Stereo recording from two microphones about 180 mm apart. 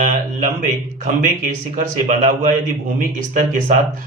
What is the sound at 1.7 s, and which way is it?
Speech, 45° right (ahead or behind).